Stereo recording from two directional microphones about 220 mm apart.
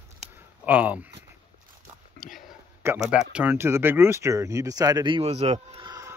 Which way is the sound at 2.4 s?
5° right (ahead or behind).